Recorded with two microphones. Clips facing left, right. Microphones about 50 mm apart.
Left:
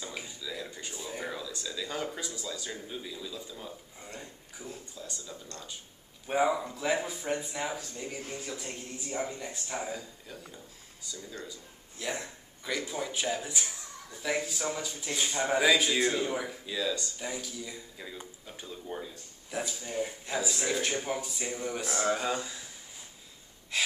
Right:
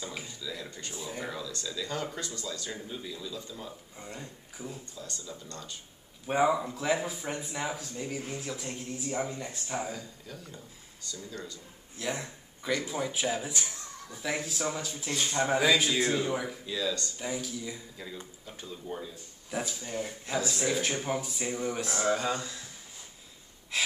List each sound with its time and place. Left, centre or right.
0.0 s speech: centre
3.5 s speech: centre
4.6 s speech: centre
5.0 s speech: centre
6.2 s speech: centre
9.8 s speech: centre
12.0 s speech: centre
23.7 s gasp: centre